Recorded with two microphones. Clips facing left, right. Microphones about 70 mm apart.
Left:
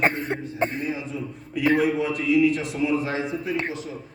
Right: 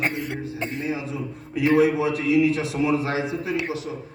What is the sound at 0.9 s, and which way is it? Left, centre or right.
Speech, right.